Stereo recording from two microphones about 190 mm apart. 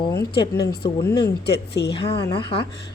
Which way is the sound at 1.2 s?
60° left (ahead or behind).